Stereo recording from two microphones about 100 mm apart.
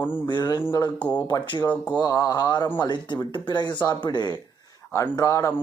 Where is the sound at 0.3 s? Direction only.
40° left (ahead or behind).